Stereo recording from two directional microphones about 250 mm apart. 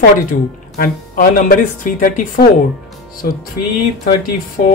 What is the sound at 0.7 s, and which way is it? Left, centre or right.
Speech, left.